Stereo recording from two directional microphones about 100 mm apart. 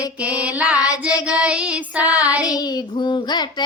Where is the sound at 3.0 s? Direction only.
50° left (ahead or behind).